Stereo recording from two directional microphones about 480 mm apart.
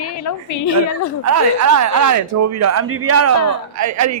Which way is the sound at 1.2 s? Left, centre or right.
Right.